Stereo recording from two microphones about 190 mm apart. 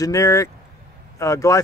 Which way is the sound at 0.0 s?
15° left (ahead or behind).